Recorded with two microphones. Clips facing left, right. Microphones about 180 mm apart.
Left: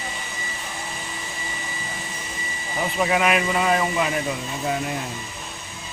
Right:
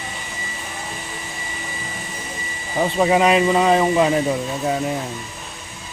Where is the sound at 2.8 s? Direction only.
30° right (ahead or behind).